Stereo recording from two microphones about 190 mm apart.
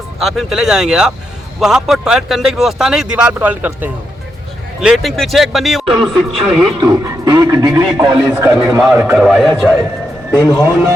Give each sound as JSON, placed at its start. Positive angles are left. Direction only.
{"t": 0.2, "sound": "speech", "side_deg": 0}
{"t": 6.8, "sound": "a man's voice", "side_deg": -15}
{"t": 10.3, "sound": "speech", "side_deg": 15}